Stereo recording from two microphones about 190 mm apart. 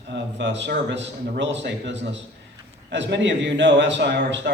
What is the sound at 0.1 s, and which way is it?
A man's voice, 70° right (ahead or behind).